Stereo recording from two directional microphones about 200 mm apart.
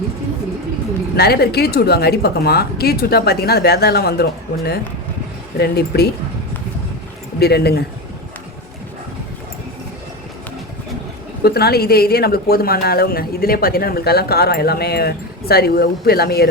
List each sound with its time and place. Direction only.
1.1 s speech: 50° left (ahead or behind)
7.3 s speech: 55° left (ahead or behind)
11.4 s speech: 50° left (ahead or behind)